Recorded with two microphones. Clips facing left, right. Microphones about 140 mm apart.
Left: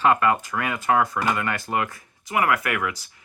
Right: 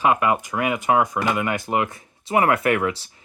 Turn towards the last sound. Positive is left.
turn(degrees=-30)  # may be behind; listen again after turning